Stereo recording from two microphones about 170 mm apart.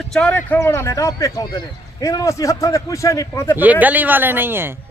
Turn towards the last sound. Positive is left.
turn(degrees=-10)  # may be behind; listen again after turning